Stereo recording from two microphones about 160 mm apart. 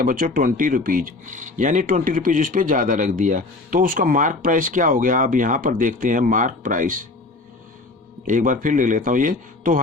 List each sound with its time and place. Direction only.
0.0 s speech: 60° right (ahead or behind)
8.2 s speech: 55° right (ahead or behind)